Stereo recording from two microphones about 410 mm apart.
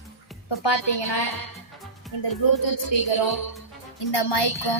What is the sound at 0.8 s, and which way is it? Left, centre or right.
Speech, left.